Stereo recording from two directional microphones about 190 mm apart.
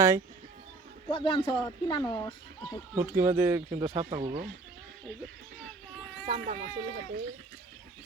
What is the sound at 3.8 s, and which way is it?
Speech, 30° right (ahead or behind).